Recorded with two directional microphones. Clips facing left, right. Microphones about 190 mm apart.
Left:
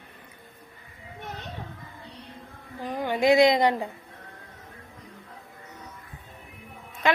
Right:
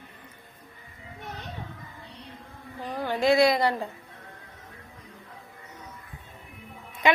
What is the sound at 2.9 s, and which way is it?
Speech, 15° left (ahead or behind).